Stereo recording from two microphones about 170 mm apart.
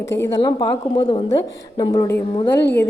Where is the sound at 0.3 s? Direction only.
25° left (ahead or behind).